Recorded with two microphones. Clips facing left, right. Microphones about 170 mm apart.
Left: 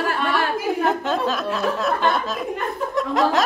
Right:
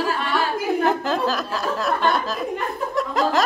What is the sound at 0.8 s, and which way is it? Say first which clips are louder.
Speech: even; centre (ahead or behind).